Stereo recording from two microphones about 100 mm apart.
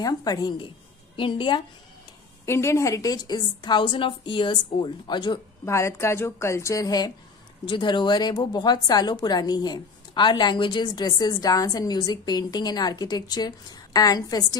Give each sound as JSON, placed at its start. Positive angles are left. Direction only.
{"t": 0.0, "sound": "speech", "side_deg": 40}
{"t": 1.1, "sound": "a woman's voice", "side_deg": 55}
{"t": 2.4, "sound": "speech", "side_deg": 30}
{"t": 5.7, "sound": "speech", "side_deg": 30}
{"t": 7.6, "sound": "speech", "side_deg": 50}